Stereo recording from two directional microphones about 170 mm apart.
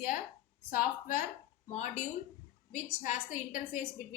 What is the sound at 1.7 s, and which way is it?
A woman's voice, 40° left (ahead or behind).